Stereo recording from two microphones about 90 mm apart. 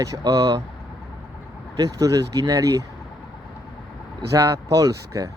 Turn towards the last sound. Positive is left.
turn(degrees=-40)  # may be behind; listen again after turning